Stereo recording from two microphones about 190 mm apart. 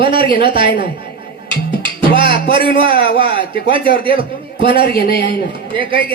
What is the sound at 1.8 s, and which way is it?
Music, 25° right (ahead or behind).